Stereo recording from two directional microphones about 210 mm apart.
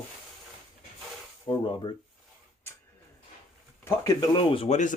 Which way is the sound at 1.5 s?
25° left (ahead or behind).